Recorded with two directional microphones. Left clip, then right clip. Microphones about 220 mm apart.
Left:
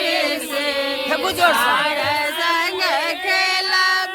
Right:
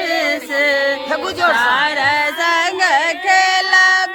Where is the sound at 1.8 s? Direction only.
20° right (ahead or behind).